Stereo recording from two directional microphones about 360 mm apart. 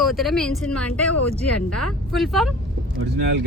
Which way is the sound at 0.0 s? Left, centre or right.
Centre.